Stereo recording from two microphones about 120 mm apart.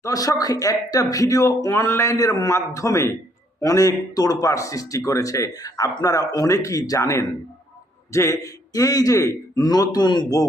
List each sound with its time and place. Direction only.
0.0 s speech: 30° left (ahead or behind)